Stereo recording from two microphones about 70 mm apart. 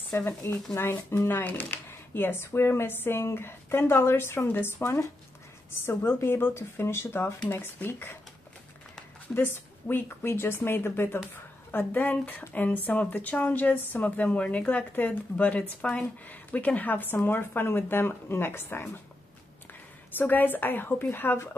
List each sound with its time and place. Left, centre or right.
0.1 s speech: left
1.4 s speech: left
9.3 s speech: left
20.1 s speech: left